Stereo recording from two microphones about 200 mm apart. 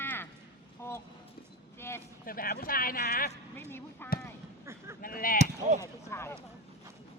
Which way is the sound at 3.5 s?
10° left (ahead or behind).